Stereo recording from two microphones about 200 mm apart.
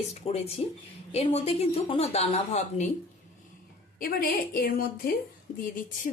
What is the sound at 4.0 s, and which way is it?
A woman's voice, 45° left (ahead or behind).